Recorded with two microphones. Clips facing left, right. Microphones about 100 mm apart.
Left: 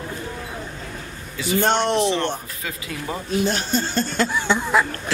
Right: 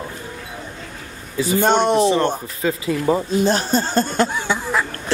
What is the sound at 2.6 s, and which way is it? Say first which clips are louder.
Speech: right 10 dB; 30° right (ahead or behind).